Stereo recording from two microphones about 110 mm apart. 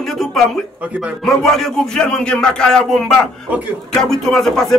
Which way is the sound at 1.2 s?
5° left (ahead or behind).